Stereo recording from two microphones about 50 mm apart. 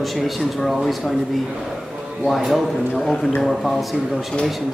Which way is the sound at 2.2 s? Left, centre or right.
Centre.